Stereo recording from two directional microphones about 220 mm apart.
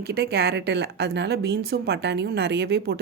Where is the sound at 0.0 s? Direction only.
45° right (ahead or behind).